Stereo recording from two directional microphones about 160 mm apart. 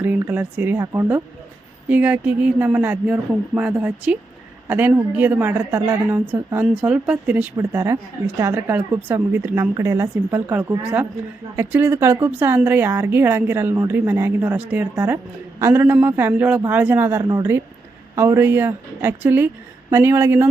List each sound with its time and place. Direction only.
0.0 s a woman's voice: 10° right (ahead or behind)